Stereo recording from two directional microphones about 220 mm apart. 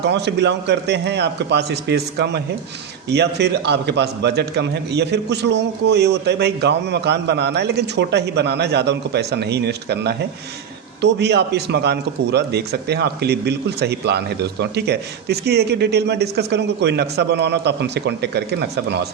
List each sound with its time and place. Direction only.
0.0 s a man's voice: 50° right (ahead or behind)